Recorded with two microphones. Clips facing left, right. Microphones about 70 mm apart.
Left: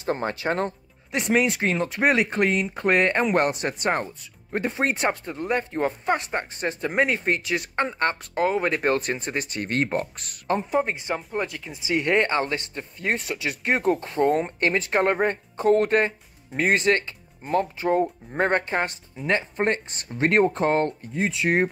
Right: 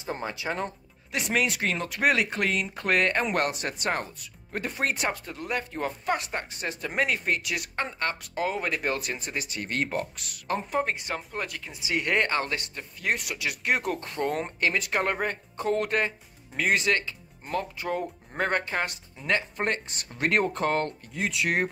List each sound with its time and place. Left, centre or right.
0.0 s speech: left
1.1 s speech: left
10.8 s speech: centre; by 13.9 s left
13.9 s speech: centre
14.6 s speech: left